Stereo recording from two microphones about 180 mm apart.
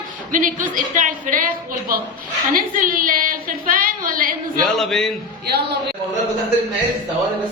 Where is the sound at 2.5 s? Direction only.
50° right (ahead or behind).